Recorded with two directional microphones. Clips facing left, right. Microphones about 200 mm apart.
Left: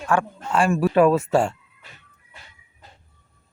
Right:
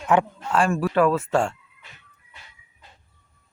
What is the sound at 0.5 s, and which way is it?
Speech, centre (ahead or behind).